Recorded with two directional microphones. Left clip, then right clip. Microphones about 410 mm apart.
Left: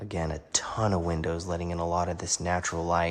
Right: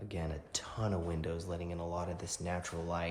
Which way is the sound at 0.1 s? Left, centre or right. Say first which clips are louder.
Left 11 dB; centre.